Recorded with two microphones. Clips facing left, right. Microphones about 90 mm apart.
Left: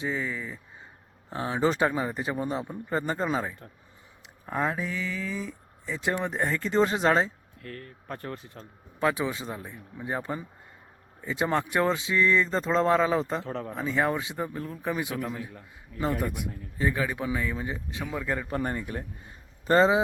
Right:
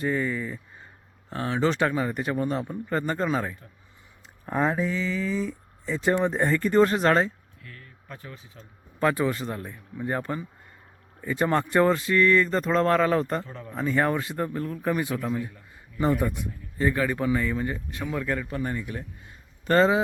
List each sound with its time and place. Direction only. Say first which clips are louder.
0.0 s a man's voice: right 5 dB; 5° left (ahead or behind)
1.3 s speech: right 1 dB; 25° left (ahead or behind)
1.7 s a man's voice: right 1 dB; 10° left (ahead or behind)
7.6 s speech: left 7 dB; 50° left (ahead or behind)
9.0 s speech: right 3 dB; 5° left (ahead or behind)
13.4 s speech: left 7 dB; 75° left (ahead or behind)
13.7 s a man's voice: right 3 dB; 5° left (ahead or behind)
16.0 s speech: right 4 dB; 10° right (ahead or behind)
16.7 s a man's voice: right 3 dB; 10° left (ahead or behind)
18.4 s speech: even; 35° left (ahead or behind)
19.6 s speech: right 1 dB; 15° left (ahead or behind)